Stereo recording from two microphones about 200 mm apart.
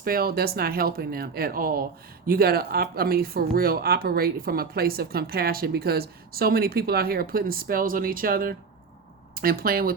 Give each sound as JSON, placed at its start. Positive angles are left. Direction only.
{"t": 0.0, "sound": "speech", "side_deg": -50}